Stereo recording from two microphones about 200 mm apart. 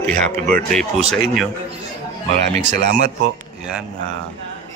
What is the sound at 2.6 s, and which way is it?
Speech, 35° right (ahead or behind).